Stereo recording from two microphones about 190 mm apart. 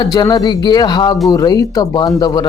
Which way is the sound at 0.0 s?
20° left (ahead or behind).